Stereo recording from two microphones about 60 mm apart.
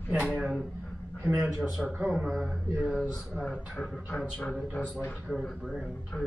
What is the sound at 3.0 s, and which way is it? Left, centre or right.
Speech, left.